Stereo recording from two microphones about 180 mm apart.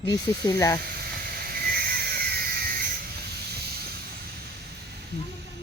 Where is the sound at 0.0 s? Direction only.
25° left (ahead or behind).